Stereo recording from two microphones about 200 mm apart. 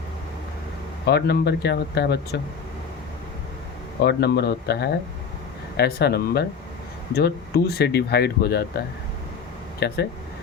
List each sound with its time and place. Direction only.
1.0 s speech: 55° left (ahead or behind)
4.0 s speech: 55° left (ahead or behind)
9.8 s speech: 55° left (ahead or behind)